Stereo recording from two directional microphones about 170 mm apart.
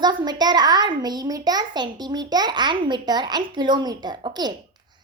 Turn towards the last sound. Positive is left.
turn(degrees=-25)  # may be behind; listen again after turning